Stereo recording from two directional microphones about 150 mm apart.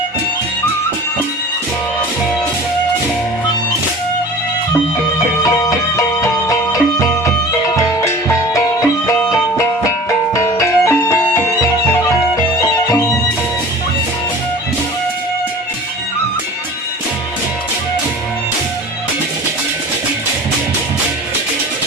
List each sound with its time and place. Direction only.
6.0 s music: 20° left (ahead or behind)
10.3 s music: 20° left (ahead or behind)